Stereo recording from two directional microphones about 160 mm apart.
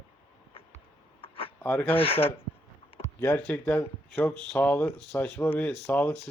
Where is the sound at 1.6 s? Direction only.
10° left (ahead or behind).